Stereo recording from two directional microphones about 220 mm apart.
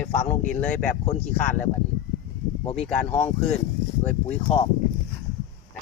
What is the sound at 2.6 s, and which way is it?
Speech, 30° left (ahead or behind).